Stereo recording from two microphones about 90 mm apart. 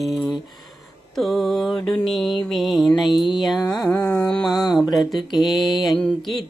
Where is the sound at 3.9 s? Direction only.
10° left (ahead or behind).